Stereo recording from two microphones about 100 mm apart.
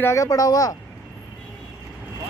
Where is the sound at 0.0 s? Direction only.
30° left (ahead or behind).